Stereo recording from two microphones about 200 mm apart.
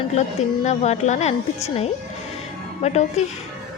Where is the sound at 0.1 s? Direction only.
35° left (ahead or behind).